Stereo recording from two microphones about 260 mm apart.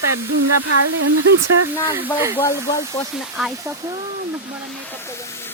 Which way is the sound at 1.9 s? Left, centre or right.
Centre.